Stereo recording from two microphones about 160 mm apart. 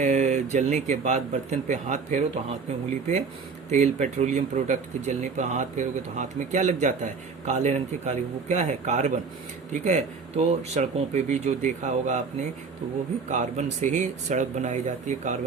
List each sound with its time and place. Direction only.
0.0 s a sound: 50° right (ahead or behind)
0.5 s speech: 50° right (ahead or behind)
3.7 s speech: 50° right (ahead or behind)